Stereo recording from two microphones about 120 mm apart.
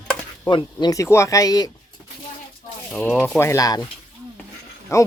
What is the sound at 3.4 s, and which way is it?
Speech, 25° left (ahead or behind).